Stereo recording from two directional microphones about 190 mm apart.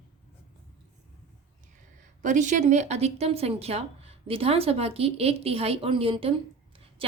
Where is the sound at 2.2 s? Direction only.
40° right (ahead or behind).